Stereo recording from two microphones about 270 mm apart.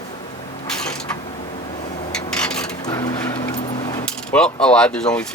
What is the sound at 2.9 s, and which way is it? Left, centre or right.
Coin, centre.